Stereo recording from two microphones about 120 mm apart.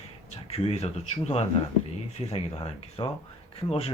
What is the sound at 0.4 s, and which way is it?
Speech, 55° left (ahead or behind).